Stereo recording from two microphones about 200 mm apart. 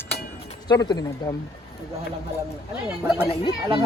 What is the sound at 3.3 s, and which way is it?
Speech, 25° left (ahead or behind).